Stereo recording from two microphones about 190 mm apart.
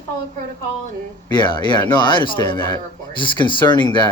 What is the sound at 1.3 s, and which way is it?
A man's voice, 25° left (ahead or behind).